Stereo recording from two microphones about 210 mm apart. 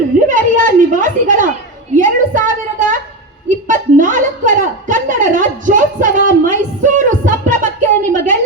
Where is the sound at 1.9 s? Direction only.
40° right (ahead or behind).